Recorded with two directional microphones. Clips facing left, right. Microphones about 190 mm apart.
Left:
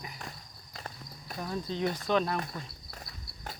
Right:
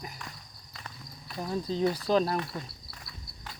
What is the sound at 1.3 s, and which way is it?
Speech, 35° right (ahead or behind).